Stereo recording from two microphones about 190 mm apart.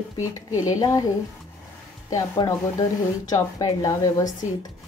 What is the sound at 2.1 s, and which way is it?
A woman's voice, 15° left (ahead or behind).